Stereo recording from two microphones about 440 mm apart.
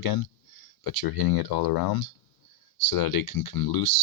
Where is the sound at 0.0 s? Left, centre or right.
Left.